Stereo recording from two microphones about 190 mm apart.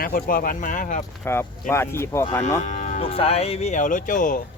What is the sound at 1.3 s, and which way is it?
Speech, 10° left (ahead or behind).